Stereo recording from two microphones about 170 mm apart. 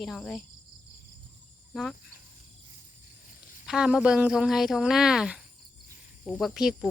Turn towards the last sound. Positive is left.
turn(degrees=0)  # may be behind; listen again after turning